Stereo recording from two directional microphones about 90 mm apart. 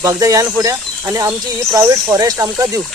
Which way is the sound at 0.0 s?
40° right (ahead or behind).